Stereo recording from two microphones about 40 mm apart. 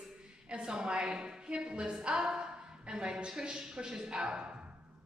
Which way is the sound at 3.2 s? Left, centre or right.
Right.